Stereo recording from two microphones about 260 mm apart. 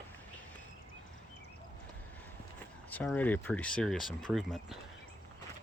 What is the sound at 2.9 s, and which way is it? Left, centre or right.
Speech, centre.